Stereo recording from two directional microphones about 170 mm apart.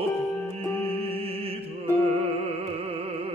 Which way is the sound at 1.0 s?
35° right (ahead or behind).